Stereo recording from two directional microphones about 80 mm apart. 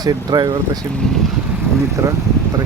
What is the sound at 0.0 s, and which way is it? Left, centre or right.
Speech, right.